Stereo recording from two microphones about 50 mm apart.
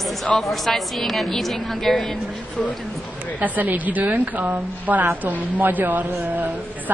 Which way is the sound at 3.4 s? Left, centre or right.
Right.